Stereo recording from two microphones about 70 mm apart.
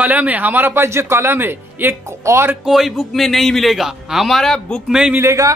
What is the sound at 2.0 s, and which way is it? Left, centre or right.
Speech, right.